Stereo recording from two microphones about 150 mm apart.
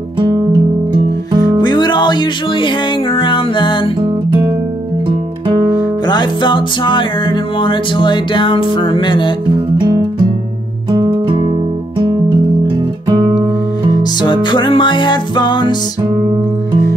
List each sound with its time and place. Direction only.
0.9 s music: 20° right (ahead or behind)
1.6 s music: 30° left (ahead or behind)
6.0 s music: 30° left (ahead or behind)
10.9 s music: 35° right (ahead or behind)
14.2 s music: 30° left (ahead or behind)